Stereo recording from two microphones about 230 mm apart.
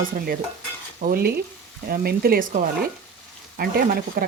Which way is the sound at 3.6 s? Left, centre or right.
Right.